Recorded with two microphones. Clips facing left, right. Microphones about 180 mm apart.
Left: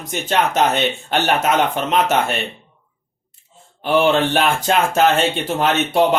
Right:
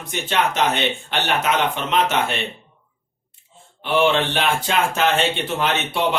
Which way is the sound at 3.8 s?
45° left (ahead or behind).